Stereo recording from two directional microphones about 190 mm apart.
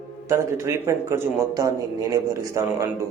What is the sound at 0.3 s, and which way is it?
A man's voice, 15° right (ahead or behind).